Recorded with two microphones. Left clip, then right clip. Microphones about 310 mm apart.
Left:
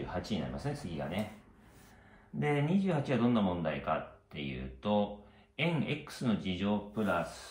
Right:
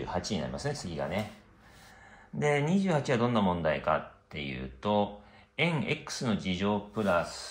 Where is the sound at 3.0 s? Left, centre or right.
Right.